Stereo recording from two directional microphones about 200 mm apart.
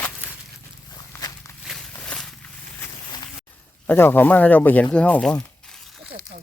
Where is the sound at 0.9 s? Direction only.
20° left (ahead or behind).